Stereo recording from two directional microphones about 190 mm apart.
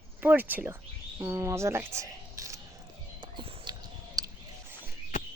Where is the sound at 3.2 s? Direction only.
25° right (ahead or behind).